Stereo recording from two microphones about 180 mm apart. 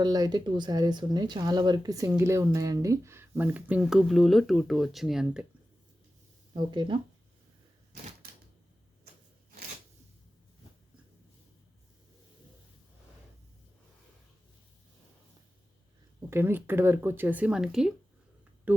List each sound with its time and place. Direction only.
0.0 s speech: 20° right (ahead or behind); by 5.5 s 5° right (ahead or behind)
6.5 s speech: 25° right (ahead or behind)
16.3 s speech: 10° right (ahead or behind)